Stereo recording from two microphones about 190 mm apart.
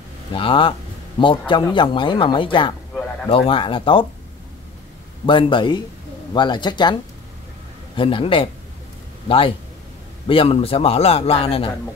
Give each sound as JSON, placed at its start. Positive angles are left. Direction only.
{"t": 0.3, "sound": "speech", "side_deg": 25}
{"t": 2.9, "sound": "a sound", "side_deg": 5}
{"t": 3.3, "sound": "speech", "side_deg": 30}
{"t": 5.2, "sound": "speech", "side_deg": 25}
{"t": 10.2, "sound": "a man's voice", "side_deg": 30}